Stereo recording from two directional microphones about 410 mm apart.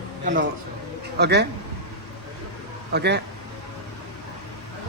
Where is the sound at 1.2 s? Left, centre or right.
Right.